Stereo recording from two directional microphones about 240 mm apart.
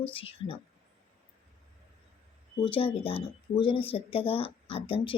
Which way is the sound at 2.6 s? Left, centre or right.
Left.